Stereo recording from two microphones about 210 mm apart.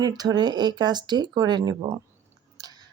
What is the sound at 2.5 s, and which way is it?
Chewing, 20° right (ahead or behind).